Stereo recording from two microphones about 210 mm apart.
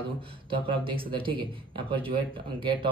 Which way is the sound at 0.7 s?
25° right (ahead or behind).